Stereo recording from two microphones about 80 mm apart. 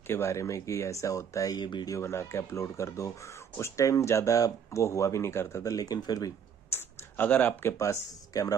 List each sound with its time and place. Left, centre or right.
0.0 s speech: left
1.6 s speech: left
1.9 s speech: left
6.7 s typing: left
7.7 s speech: left